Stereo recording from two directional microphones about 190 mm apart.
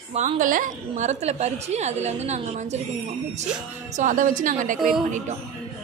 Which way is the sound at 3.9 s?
40° right (ahead or behind).